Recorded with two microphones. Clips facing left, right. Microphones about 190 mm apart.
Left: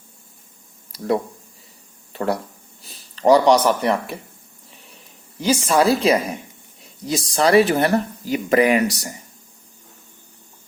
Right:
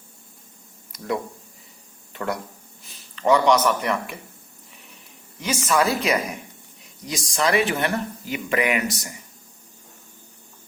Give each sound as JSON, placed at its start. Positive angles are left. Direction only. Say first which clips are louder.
{"t": 0.9, "sound": "speech", "louder": "left 6 dB", "side_deg": 35}
{"t": 5.4, "sound": "speech", "louder": "left 5 dB", "side_deg": 30}